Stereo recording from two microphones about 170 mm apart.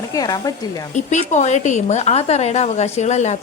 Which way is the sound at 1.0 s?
45° left (ahead or behind).